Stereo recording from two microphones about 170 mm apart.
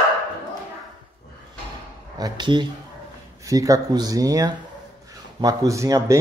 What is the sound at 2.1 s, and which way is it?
Speech, 25° right (ahead or behind).